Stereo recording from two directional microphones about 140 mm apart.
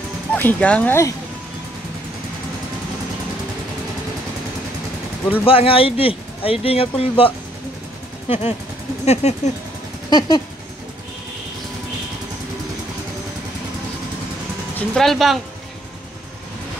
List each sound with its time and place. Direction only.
0.3 s speech: 10° left (ahead or behind)
5.4 s speech: 40° left (ahead or behind)
8.3 s speech: 50° left (ahead or behind)
10.0 s a sound: 30° left (ahead or behind)
14.8 s speech: centre (ahead or behind)